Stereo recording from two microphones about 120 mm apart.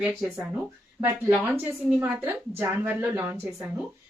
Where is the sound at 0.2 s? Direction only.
15° right (ahead or behind).